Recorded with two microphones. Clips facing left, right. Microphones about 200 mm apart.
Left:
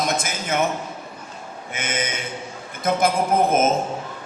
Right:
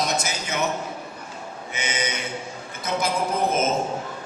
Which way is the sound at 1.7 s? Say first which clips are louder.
Left 2 dB; 50° left (ahead or behind).